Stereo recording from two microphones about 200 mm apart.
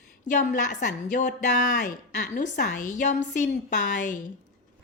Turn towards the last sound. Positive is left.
turn(degrees=40)  # may be behind; listen again after turning